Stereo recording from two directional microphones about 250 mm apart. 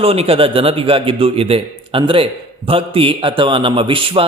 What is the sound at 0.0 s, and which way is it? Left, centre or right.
A man's voice, right.